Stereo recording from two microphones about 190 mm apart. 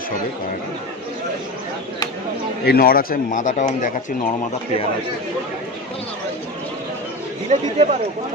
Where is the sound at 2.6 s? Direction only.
50° left (ahead or behind).